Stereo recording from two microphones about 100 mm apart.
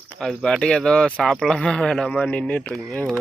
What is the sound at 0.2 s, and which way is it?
Speech, 5° left (ahead or behind).